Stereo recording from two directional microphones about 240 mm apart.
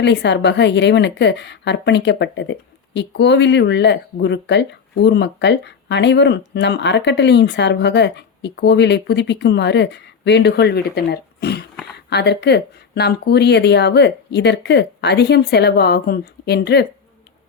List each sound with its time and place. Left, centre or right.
0.0 s a woman's voice: left